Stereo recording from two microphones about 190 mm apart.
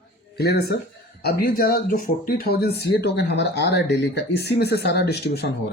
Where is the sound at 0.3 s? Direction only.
55° left (ahead or behind).